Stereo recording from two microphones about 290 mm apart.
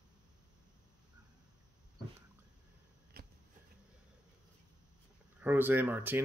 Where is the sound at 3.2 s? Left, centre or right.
Right.